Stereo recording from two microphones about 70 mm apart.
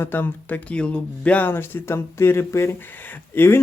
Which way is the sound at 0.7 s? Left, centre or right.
Centre.